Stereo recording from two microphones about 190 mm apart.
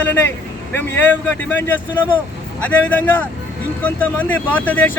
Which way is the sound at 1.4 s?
10° left (ahead or behind).